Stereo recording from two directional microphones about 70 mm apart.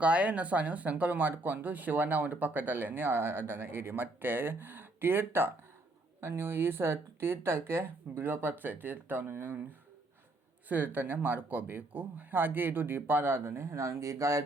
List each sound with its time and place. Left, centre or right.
0.0 s speech: centre
10.7 s speech: right